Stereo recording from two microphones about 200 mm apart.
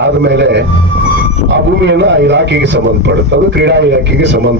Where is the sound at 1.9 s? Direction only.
60° right (ahead or behind).